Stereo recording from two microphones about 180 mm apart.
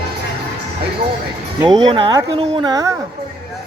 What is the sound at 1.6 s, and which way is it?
Speech, 25° right (ahead or behind).